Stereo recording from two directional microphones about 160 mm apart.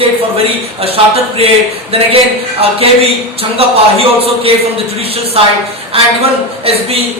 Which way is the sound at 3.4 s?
35° right (ahead or behind).